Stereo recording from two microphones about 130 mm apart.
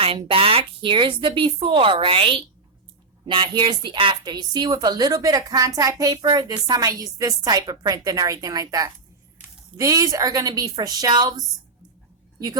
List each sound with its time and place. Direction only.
0.3 s a woman's voice: 45° right (ahead or behind)